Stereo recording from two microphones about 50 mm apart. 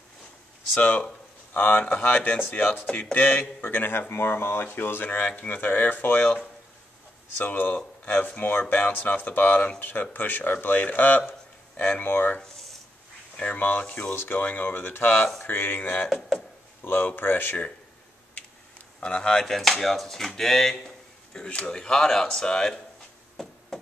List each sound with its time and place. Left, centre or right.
0.7 s a man's voice: left
1.5 s speech: left
1.9 s a man's voice: left
2.9 s a sound: left
3.2 s a man's voice: left
5.2 s a man's voice: left
13.4 s a man's voice: left
18.3 s speech: left; by 20.7 s centre
21.5 s speech: left
23.4 s a sound: centre